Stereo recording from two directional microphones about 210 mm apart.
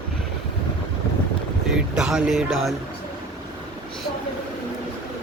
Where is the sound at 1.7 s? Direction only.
5° right (ahead or behind).